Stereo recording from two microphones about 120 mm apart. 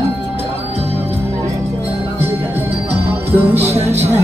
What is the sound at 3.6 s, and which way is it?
Music, 60° right (ahead or behind).